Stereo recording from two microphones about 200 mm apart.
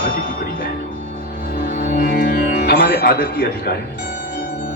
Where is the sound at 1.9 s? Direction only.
45° left (ahead or behind).